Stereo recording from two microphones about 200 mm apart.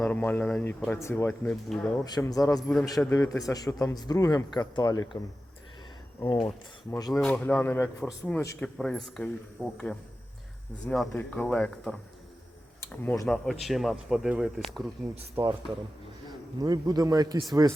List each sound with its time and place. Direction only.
0.0 s a man's voice: 10° left (ahead or behind)
2.0 s a man's voice: 20° left (ahead or behind)
6.1 s a man's voice: 25° left (ahead or behind)
7.1 s a man's voice: 5° left (ahead or behind)
8.6 s speech: centre (ahead or behind)
10.8 s speech: centre (ahead or behind)
15.4 s a man's voice: 30° right (ahead or behind)
16.6 s a man's voice: 20° right (ahead or behind)